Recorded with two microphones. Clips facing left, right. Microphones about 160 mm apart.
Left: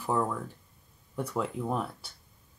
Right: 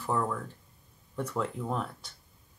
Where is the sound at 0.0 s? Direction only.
10° left (ahead or behind).